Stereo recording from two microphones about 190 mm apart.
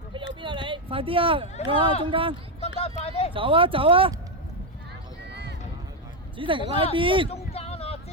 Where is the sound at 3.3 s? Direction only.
30° right (ahead or behind).